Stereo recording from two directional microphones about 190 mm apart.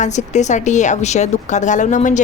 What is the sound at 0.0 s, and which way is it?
A woman's voice, 40° left (ahead or behind).